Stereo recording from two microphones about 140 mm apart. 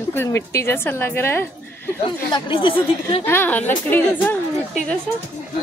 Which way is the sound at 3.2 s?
10° left (ahead or behind).